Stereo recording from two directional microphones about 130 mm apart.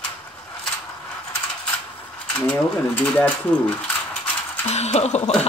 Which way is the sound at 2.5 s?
10° left (ahead or behind).